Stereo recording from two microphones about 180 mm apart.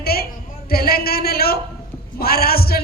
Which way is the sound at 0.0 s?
60° left (ahead or behind).